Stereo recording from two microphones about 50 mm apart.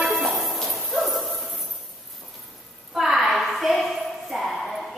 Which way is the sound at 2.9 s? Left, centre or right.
Centre.